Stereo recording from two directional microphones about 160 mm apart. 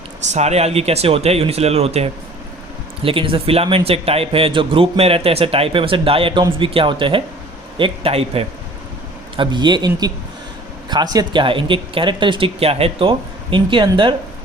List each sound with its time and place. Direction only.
0.3 s a man's voice: 45° right (ahead or behind)